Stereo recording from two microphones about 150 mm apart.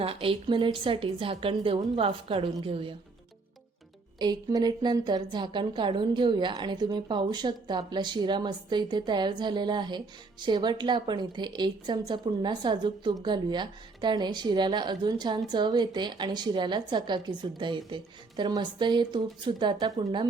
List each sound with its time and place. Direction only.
0.0 s a woman's voice: 40° right (ahead or behind)
4.2 s a woman's voice: 25° right (ahead or behind)